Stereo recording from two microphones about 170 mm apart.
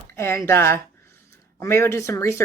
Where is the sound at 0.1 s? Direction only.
15° left (ahead or behind).